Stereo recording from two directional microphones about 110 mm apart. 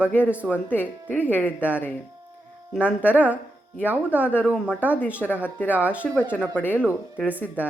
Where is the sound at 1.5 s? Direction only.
15° right (ahead or behind).